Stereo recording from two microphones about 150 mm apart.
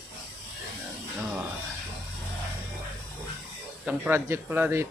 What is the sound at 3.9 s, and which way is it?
Speech, 10° right (ahead or behind).